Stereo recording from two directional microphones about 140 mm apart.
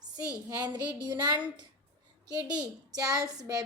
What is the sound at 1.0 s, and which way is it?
Speech, 30° right (ahead or behind).